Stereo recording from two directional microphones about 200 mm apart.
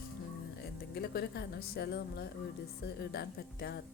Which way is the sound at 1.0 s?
55° left (ahead or behind).